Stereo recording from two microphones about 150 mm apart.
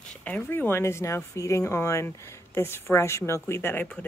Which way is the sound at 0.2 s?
10° left (ahead or behind).